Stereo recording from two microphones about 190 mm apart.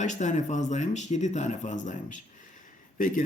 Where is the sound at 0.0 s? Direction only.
40° left (ahead or behind).